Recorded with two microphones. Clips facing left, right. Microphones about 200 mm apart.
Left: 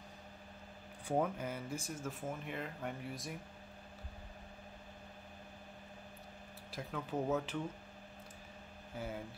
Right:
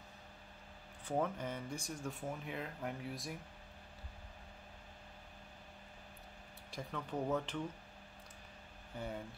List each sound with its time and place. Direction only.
1.0 s speech: 10° left (ahead or behind)
6.7 s speech: 5° left (ahead or behind)
8.9 s speech: 5° left (ahead or behind)